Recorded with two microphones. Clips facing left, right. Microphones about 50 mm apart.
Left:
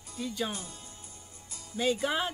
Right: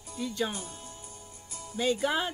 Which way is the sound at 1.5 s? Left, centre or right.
Right.